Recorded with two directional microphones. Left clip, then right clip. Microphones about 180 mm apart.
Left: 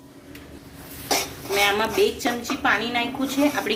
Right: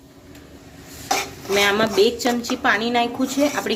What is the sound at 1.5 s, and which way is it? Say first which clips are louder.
Speech: right 3 dB; 70° right (ahead or behind).